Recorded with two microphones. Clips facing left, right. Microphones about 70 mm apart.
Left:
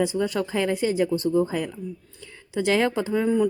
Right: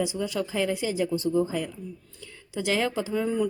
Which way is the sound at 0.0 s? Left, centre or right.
Left.